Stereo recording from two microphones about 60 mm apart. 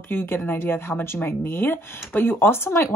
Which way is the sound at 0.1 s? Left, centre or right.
Left.